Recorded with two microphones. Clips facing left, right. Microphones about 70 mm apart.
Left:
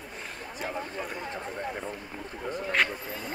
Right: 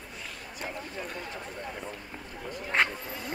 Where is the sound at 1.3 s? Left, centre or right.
Left.